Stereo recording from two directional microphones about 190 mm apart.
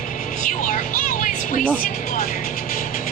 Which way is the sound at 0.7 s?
45° left (ahead or behind).